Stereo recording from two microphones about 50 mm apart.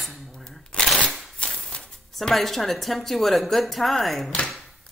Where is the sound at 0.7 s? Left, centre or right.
Left.